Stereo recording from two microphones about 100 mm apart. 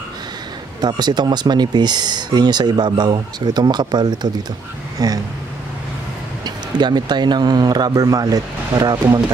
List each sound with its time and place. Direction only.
0.7 s speech: 45° right (ahead or behind)
6.4 s speech: 45° right (ahead or behind)